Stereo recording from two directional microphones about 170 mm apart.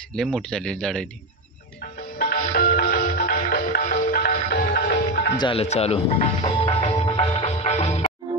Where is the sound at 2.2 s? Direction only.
60° left (ahead or behind).